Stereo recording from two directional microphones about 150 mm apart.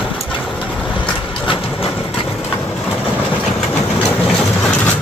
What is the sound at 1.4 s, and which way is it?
Vehicle, 35° left (ahead or behind).